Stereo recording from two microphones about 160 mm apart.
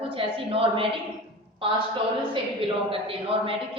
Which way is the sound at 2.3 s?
35° right (ahead or behind).